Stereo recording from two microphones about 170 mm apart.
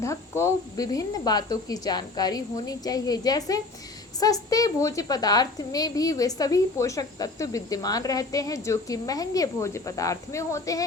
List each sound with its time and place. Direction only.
0.0 s a woman's voice: 15° left (ahead or behind)